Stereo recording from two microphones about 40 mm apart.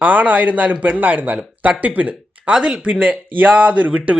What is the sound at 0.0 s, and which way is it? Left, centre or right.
Speech, right.